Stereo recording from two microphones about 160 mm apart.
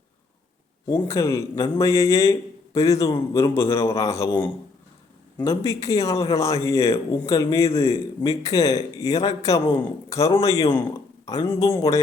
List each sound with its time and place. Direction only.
0.9 s a man's voice: 20° left (ahead or behind)
5.5 s a man's voice: 20° left (ahead or behind)